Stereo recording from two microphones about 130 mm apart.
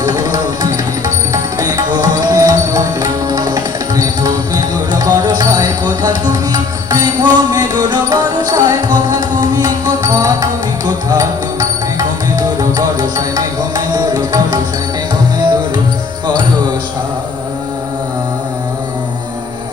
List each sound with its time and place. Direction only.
0.0 s music: 30° right (ahead or behind)